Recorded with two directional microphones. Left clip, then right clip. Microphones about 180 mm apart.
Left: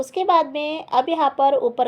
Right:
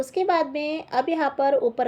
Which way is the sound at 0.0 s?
30° left (ahead or behind).